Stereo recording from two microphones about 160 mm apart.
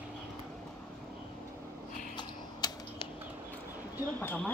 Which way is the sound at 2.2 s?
30° left (ahead or behind).